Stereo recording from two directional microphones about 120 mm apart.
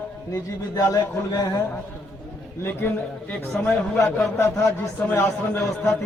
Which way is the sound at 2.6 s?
15° left (ahead or behind).